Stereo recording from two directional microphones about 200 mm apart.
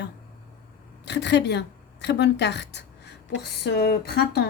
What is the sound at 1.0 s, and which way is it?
A woman's voice, 60° left (ahead or behind).